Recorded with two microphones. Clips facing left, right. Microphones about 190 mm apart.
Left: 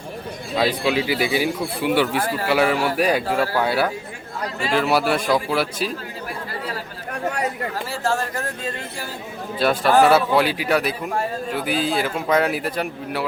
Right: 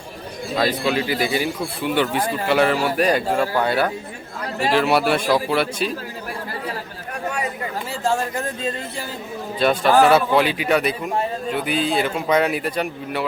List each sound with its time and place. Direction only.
0.5 s a man's voice: 10° left (ahead or behind)
8.0 s speech: 15° right (ahead or behind)
9.6 s speech: 5° left (ahead or behind)